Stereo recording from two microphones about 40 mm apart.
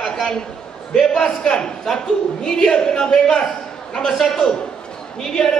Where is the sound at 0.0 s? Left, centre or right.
Centre.